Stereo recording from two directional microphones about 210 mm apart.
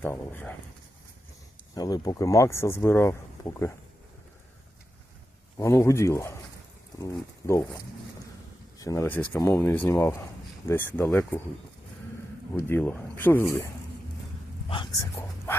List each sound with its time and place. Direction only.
0.0 s speech: 10° left (ahead or behind)
1.7 s speech: 20° left (ahead or behind)
5.5 s speech: 15° left (ahead or behind)
8.8 s speech: 15° left (ahead or behind)
12.5 s speech: 10° left (ahead or behind)
14.7 s speech: 20° left (ahead or behind)